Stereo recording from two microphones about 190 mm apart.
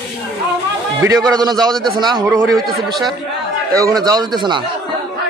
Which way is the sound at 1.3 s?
20° right (ahead or behind).